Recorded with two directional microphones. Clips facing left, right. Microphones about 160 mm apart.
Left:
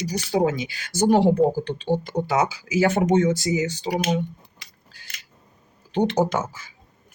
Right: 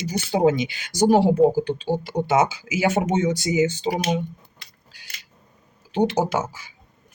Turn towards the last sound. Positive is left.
turn(degrees=-10)  # may be behind; listen again after turning